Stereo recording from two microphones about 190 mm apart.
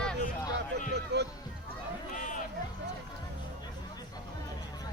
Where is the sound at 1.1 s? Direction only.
60° right (ahead or behind).